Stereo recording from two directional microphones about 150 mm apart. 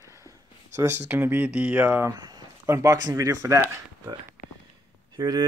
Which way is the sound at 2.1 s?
25° right (ahead or behind).